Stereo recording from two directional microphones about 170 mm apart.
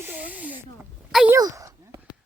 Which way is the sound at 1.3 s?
20° right (ahead or behind).